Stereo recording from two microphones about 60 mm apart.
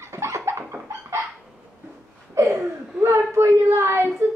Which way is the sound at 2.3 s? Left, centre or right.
Right.